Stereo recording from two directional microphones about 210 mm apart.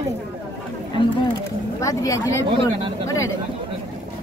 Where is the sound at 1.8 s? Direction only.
15° left (ahead or behind).